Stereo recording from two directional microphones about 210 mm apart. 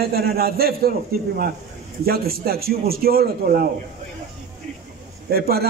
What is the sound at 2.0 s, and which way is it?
A man's voice, 45° right (ahead or behind).